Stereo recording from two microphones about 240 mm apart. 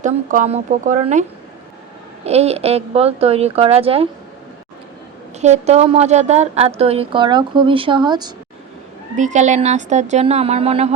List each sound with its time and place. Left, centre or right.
0.0 s a woman's voice: right
2.2 s a woman's voice: right
5.4 s a woman's voice: right
9.1 s a woman's voice: right